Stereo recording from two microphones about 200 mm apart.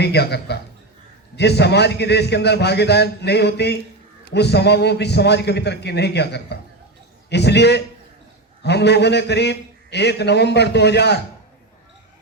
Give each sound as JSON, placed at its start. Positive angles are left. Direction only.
{"t": 0.0, "sound": "a man's voice", "side_deg": 55}